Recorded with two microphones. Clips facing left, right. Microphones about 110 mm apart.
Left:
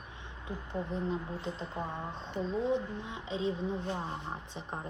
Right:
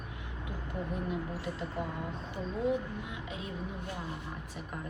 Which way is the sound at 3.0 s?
25° left (ahead or behind).